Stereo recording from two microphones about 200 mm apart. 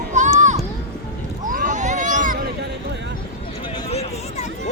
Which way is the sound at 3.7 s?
30° left (ahead or behind).